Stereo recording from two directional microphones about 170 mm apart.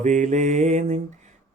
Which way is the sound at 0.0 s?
45° right (ahead or behind).